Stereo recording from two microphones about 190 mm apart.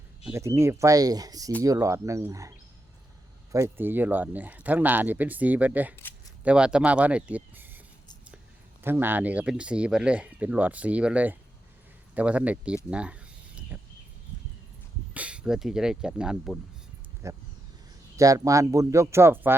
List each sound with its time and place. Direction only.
0.3 s speech: 15° right (ahead or behind)
8.8 s speech: 10° right (ahead or behind)
13.7 s a sound: 10° right (ahead or behind)
15.1 s speech: 5° right (ahead or behind)
17.2 s speech: 15° right (ahead or behind)